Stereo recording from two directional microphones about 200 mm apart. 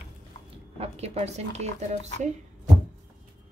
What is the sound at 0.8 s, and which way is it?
A woman's voice, 30° right (ahead or behind).